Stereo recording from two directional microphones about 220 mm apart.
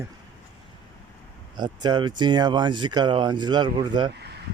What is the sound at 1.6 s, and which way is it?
Speech, 20° right (ahead or behind).